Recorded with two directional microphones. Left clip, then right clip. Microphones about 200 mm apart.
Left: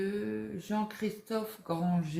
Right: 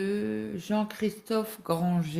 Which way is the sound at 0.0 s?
50° right (ahead or behind).